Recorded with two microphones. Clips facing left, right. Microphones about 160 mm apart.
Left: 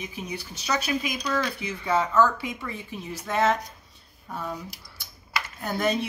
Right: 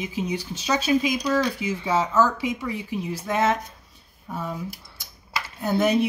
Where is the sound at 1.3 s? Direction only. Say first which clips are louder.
Right 5 dB; 10° right (ahead or behind).